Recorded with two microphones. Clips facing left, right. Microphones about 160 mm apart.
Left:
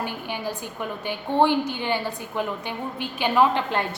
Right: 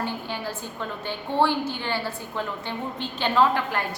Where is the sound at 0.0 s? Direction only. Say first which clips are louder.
Left 1 dB; 15° left (ahead or behind).